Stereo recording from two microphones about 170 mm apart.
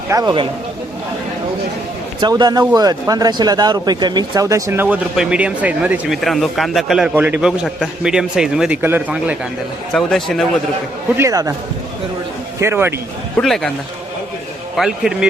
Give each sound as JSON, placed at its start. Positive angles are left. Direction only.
{"t": 0.1, "sound": "speech", "side_deg": -20}
{"t": 2.2, "sound": "a man's voice", "side_deg": -25}
{"t": 9.9, "sound": "a man's voice", "side_deg": 0}
{"t": 11.2, "sound": "speech", "side_deg": -20}
{"t": 12.5, "sound": "a man's voice", "side_deg": -15}
{"t": 13.3, "sound": "a man's voice", "side_deg": 0}
{"t": 14.8, "sound": "a man's voice", "side_deg": -5}